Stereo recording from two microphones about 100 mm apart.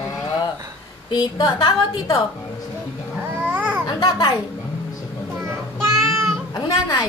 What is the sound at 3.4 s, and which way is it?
Babbling, 15° right (ahead or behind).